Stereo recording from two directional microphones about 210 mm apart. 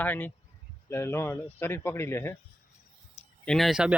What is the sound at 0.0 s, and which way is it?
Speech, 10° left (ahead or behind).